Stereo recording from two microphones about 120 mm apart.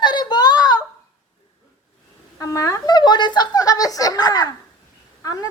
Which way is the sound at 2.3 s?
25° left (ahead or behind).